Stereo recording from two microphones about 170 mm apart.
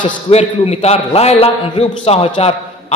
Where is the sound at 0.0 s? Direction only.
40° left (ahead or behind).